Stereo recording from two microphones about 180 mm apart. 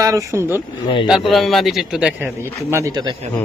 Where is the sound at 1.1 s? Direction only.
Centre (ahead or behind).